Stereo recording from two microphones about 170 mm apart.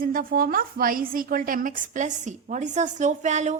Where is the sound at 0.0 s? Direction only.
55° right (ahead or behind).